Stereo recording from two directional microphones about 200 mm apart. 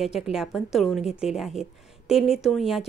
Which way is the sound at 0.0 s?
Centre (ahead or behind).